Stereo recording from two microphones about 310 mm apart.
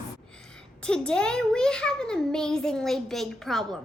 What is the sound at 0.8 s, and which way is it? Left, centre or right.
A child's voice, centre.